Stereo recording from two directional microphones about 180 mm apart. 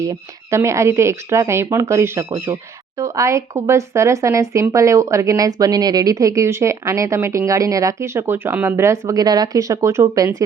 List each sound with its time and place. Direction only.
0.0 s speech: 15° right (ahead or behind)